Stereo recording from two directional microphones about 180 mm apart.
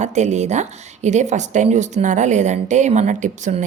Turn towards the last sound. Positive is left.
turn(degrees=-40)  # may be behind; listen again after turning